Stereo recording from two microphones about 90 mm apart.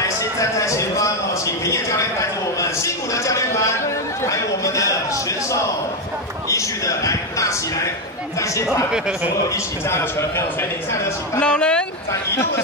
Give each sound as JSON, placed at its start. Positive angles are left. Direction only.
{"t": 0.0, "sound": "a sound", "side_deg": 35}
{"t": 4.3, "sound": "chatter", "side_deg": 35}
{"t": 6.5, "sound": "a sound", "side_deg": 35}
{"t": 9.8, "sound": "a man's voice", "side_deg": 30}
{"t": 11.3, "sound": "speech", "side_deg": 10}
{"t": 12.1, "sound": "a man's voice", "side_deg": 30}